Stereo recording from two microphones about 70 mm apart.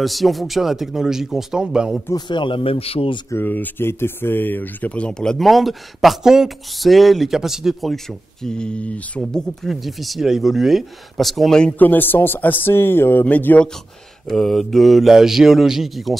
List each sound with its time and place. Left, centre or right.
0.0 s speech: centre
2.1 s speech: left
3.3 s speech: left; by 7.9 s centre
7.9 s speech: centre
11.8 s a man's voice: left
14.2 s speech: centre